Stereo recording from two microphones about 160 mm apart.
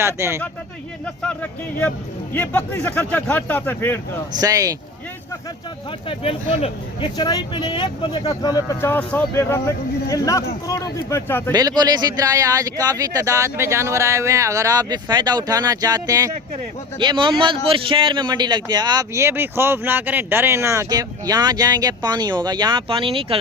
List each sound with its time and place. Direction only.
0.0 s speech: 15° right (ahead or behind)
1.0 s speech: 10° left (ahead or behind)
4.4 s a man's voice: 20° right (ahead or behind)
6.1 s speech: 35° left (ahead or behind)
7.2 s speech: 25° left (ahead or behind)
11.5 s a man's voice: 25° right (ahead or behind)